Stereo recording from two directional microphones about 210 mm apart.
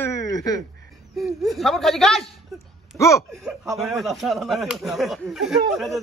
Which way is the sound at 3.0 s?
15° left (ahead or behind).